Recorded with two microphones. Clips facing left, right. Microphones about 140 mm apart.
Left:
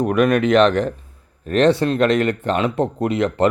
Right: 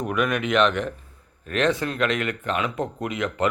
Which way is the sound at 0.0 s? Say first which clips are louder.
Left 8 dB; 40° left (ahead or behind).